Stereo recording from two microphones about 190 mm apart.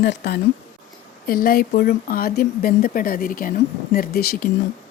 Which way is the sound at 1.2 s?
50° left (ahead or behind).